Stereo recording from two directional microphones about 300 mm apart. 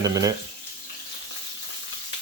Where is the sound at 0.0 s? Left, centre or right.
Centre.